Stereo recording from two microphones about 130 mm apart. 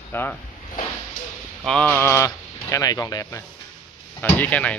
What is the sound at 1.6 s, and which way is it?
Speech, 10° left (ahead or behind).